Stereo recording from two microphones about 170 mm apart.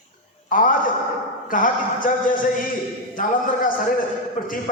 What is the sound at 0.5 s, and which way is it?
A man's voice, 55° left (ahead or behind).